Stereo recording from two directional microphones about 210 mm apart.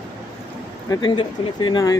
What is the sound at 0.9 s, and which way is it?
Speech, 20° left (ahead or behind).